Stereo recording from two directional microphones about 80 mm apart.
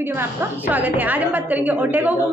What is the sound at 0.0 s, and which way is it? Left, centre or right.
A woman's voice, right.